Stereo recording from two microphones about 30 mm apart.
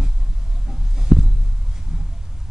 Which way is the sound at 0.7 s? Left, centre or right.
Centre.